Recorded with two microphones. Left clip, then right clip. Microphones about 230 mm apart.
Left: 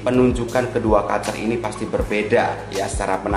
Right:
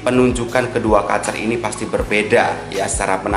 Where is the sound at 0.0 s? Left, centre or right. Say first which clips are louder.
Right 2 dB; centre.